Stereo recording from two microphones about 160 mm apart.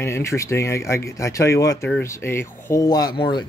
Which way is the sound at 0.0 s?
15° left (ahead or behind).